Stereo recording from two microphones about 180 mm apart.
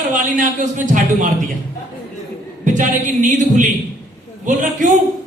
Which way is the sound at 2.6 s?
45° right (ahead or behind).